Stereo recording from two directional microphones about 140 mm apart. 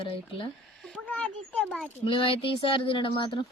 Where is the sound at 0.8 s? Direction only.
5° left (ahead or behind).